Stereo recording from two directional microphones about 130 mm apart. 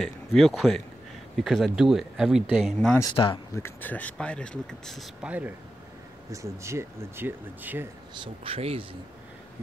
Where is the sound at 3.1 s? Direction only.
40° left (ahead or behind).